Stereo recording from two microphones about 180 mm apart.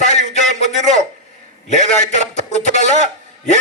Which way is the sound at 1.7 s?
40° left (ahead or behind).